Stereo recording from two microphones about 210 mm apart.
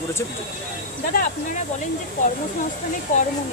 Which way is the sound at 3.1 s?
40° left (ahead or behind).